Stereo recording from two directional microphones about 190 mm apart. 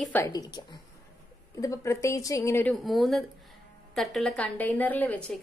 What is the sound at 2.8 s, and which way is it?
A woman's voice, centre (ahead or behind).